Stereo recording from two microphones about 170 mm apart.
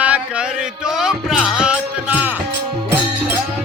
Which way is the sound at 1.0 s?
Centre (ahead or behind).